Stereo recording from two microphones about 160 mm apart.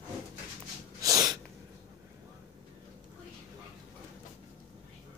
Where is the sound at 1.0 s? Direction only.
20° right (ahead or behind).